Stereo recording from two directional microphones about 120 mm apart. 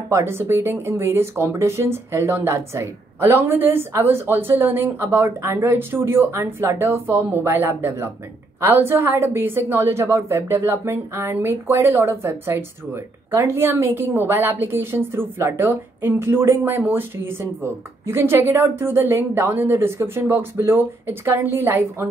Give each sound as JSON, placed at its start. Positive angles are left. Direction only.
{"t": 0.1, "sound": "a woman's voice", "side_deg": -20}